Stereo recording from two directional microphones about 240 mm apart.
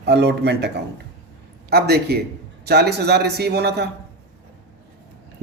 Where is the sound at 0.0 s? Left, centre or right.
Right.